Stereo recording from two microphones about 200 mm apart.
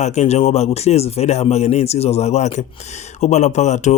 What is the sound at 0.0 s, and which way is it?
Speech, 35° left (ahead or behind).